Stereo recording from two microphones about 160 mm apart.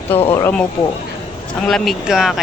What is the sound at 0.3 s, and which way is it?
Speech, 15° left (ahead or behind).